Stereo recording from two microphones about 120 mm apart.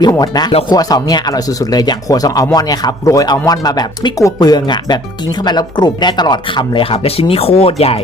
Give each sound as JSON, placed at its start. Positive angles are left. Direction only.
{"t": 0.0, "sound": "speech", "side_deg": 35}